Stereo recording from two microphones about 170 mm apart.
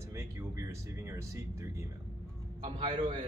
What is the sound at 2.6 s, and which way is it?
Speech, 35° right (ahead or behind).